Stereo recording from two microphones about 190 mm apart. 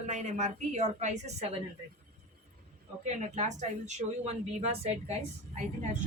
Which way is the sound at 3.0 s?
35° right (ahead or behind).